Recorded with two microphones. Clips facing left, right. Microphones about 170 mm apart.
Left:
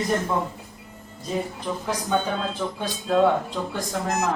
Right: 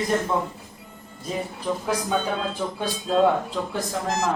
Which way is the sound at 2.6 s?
20° right (ahead or behind).